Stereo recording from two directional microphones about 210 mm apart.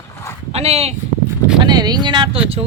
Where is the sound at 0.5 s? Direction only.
30° right (ahead or behind).